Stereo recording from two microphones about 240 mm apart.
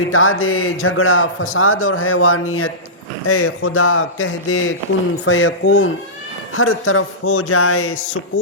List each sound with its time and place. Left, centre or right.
0.1 s speech: left